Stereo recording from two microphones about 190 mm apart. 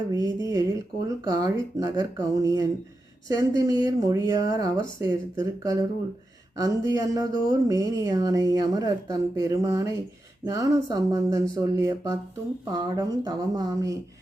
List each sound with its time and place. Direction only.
0.1 s speech: 20° right (ahead or behind)